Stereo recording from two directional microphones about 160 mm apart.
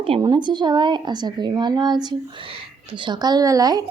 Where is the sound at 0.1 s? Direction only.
35° right (ahead or behind).